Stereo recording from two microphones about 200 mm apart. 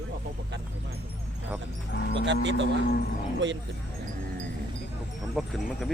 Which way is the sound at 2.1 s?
60° right (ahead or behind).